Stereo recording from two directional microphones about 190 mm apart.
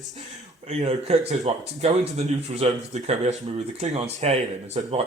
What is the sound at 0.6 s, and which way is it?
Speech, 35° right (ahead or behind).